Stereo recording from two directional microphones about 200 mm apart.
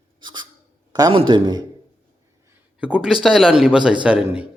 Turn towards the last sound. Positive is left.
turn(degrees=-5)  # may be behind; listen again after turning